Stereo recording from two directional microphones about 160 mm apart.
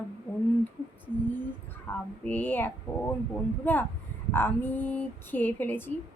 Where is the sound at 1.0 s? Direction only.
10° left (ahead or behind).